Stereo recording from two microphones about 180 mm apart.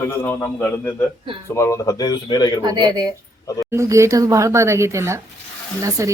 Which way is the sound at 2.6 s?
20° right (ahead or behind).